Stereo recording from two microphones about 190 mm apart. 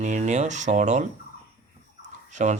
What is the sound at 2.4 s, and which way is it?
Speech, 40° right (ahead or behind).